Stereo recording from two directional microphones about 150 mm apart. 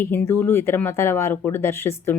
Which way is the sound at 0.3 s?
15° left (ahead or behind).